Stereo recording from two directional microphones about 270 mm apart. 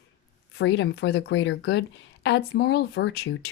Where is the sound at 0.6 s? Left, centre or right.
Left.